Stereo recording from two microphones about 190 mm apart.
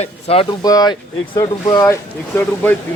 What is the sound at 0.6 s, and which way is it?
Speech, 20° left (ahead or behind).